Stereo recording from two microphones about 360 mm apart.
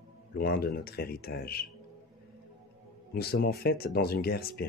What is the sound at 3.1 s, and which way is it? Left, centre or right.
Speech, left.